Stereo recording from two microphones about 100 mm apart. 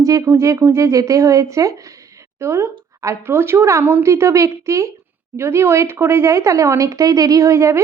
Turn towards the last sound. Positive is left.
turn(degrees=-30)  # may be behind; listen again after turning